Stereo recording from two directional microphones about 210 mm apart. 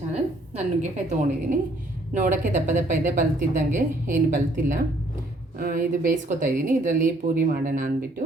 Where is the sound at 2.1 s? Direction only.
35° right (ahead or behind).